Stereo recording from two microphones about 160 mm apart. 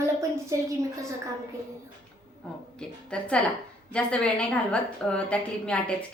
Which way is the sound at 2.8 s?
5° left (ahead or behind).